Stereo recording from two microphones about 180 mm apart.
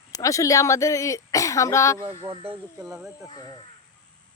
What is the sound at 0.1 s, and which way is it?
Speech, 20° left (ahead or behind).